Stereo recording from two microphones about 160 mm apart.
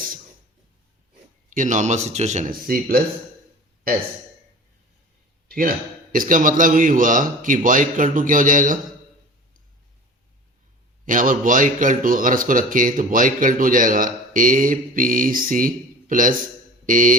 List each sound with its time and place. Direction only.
1.5 s speech: 55° right (ahead or behind)
5.5 s speech: 65° right (ahead or behind)
11.0 s speech: 55° right (ahead or behind)
16.8 s mantra: 55° right (ahead or behind)